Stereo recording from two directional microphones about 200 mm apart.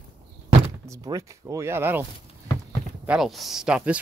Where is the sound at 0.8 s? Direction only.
15° right (ahead or behind).